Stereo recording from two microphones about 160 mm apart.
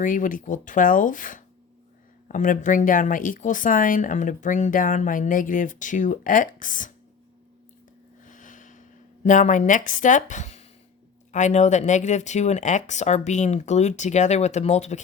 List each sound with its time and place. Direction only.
0.0 s speech: 55° left (ahead or behind)
8.2 s a sound: 55° left (ahead or behind)
9.2 s speech: 50° left (ahead or behind)